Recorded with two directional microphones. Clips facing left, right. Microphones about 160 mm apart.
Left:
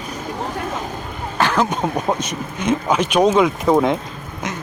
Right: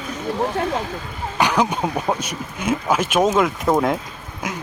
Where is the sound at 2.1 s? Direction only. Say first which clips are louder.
Left 3 dB; 10° right (ahead or behind).